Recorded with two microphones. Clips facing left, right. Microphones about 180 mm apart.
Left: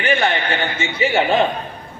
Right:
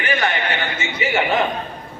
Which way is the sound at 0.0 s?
30° left (ahead or behind).